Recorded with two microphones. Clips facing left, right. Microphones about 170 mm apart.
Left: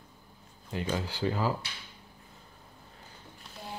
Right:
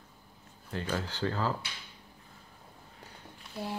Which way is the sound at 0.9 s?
10° left (ahead or behind).